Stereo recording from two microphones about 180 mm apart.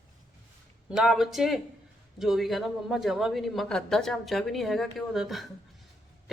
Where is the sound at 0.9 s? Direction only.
Centre (ahead or behind).